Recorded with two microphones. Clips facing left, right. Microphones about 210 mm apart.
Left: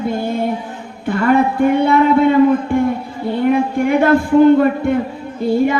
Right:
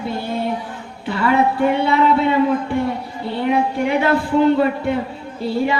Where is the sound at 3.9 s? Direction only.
50° left (ahead or behind).